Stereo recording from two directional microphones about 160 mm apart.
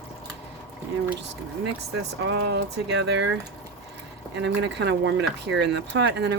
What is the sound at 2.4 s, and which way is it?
Speech, 90° right.